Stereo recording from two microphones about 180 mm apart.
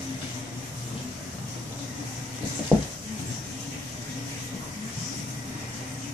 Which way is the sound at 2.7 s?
10° right (ahead or behind).